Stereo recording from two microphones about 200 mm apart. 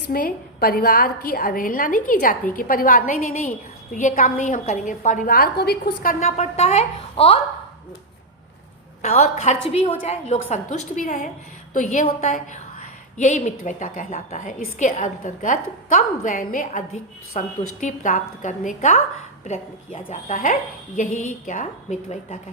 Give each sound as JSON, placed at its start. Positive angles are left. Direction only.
{"t": 0.1, "sound": "a woman's voice", "side_deg": 45}
{"t": 9.0, "sound": "a woman's voice", "side_deg": 35}